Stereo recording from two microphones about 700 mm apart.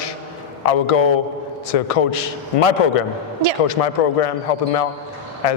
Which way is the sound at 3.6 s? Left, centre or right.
Left.